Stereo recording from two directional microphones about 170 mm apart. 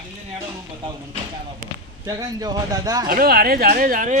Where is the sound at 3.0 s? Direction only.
60° right (ahead or behind).